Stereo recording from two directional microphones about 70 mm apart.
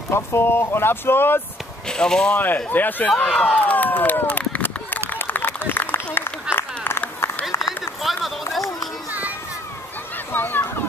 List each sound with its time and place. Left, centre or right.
0.1 s speech: left
1.9 s speech: centre
2.3 s speech: left
3.3 s run: centre
5.1 s a sound: left
6.5 s run: left
7.6 s run: centre
10.1 s a sound: left